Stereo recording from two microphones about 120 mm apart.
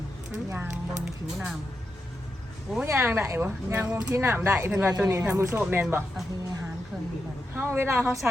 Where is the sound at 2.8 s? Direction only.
20° right (ahead or behind).